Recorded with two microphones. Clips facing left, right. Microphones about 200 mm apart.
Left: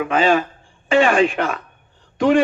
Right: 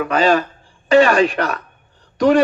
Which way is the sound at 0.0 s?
40° right (ahead or behind).